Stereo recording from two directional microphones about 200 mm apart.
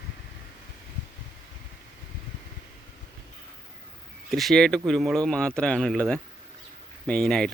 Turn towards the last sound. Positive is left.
turn(degrees=5)  # may be behind; listen again after turning